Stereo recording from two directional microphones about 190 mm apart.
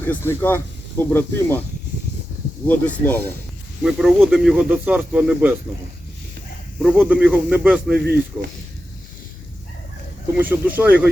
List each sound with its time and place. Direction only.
0.0 s speech: 10° left (ahead or behind)
2.6 s speech: 10° left (ahead or behind)
3.8 s speech: 5° right (ahead or behind)
6.8 s speech: 5° right (ahead or behind)
7.9 s speech: 55° right (ahead or behind)
10.3 s speech: 10° right (ahead or behind)